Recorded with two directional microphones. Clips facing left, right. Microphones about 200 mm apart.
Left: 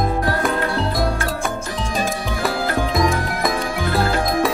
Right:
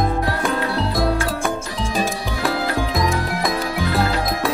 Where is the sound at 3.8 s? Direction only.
50° left (ahead or behind).